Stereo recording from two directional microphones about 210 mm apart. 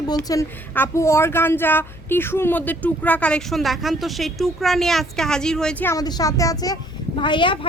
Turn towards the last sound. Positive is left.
turn(degrees=25)  # may be behind; listen again after turning